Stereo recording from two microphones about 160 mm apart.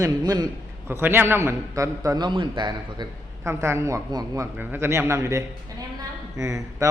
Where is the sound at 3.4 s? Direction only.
15° right (ahead or behind).